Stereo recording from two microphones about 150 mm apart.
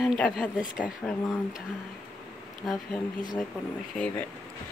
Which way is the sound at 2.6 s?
Centre (ahead or behind).